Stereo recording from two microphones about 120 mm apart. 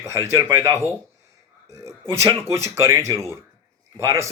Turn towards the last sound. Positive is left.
turn(degrees=-25)  # may be behind; listen again after turning